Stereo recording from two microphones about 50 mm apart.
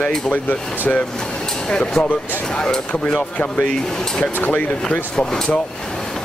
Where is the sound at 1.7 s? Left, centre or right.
Centre.